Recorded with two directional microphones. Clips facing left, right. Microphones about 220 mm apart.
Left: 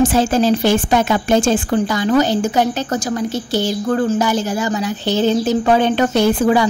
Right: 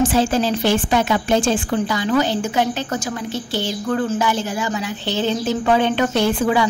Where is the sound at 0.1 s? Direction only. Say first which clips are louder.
Left 3 dB; 45° left (ahead or behind).